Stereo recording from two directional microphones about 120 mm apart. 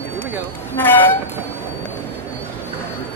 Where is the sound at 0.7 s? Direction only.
15° left (ahead or behind).